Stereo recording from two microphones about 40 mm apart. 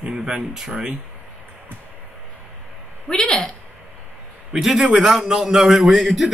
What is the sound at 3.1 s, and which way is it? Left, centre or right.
Speech, centre.